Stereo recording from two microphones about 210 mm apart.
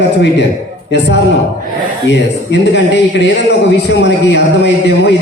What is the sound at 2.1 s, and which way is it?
A man's voice, 55° left (ahead or behind).